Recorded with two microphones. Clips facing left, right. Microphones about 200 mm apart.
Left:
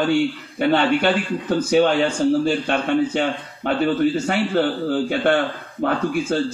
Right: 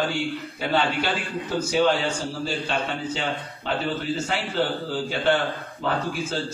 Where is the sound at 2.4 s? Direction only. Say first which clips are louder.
Left 7 dB; 55° left (ahead or behind).